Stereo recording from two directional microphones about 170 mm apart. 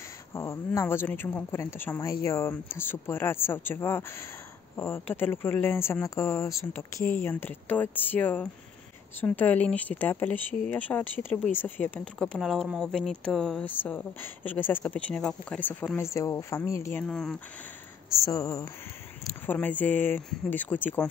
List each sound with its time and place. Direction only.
0.3 s speech: 15° left (ahead or behind)
17.1 s speech: 5° left (ahead or behind)
18.2 s speech: 20° left (ahead or behind)